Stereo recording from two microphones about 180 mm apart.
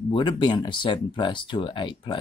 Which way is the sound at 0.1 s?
25° left (ahead or behind).